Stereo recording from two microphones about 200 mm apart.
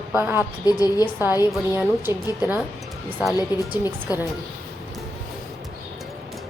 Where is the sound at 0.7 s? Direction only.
15° left (ahead or behind).